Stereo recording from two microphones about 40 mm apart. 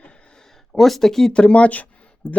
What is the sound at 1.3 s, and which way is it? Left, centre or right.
Speech, left.